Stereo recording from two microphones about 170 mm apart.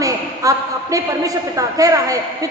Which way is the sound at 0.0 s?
20° right (ahead or behind).